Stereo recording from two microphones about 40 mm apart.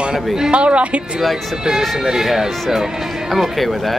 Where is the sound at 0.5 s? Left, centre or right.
Right.